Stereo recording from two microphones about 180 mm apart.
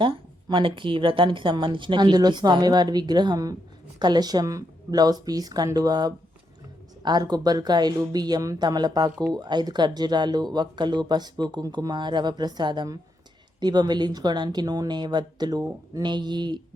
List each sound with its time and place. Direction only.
0.0 s speech: 25° right (ahead or behind)